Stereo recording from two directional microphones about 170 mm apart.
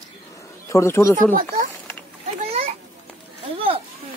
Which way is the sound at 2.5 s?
35° right (ahead or behind).